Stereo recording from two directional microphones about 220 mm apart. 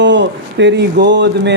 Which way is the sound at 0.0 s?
55° right (ahead or behind).